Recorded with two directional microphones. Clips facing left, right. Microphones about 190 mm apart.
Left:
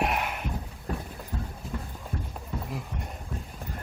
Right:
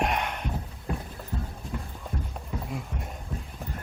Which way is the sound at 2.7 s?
Centre (ahead or behind).